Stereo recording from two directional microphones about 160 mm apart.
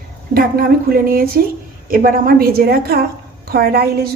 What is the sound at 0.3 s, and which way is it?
A woman's voice, 70° right (ahead or behind).